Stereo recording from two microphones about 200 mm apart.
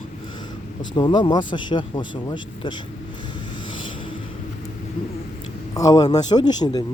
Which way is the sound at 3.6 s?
25° left (ahead or behind).